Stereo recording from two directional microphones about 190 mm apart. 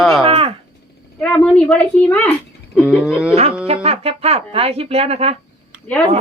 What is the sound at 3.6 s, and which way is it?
Speech, 30° right (ahead or behind).